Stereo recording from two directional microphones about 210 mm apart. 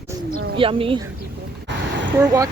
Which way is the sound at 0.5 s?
25° right (ahead or behind).